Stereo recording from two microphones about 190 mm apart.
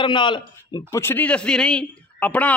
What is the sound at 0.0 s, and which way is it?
Speech, 25° left (ahead or behind).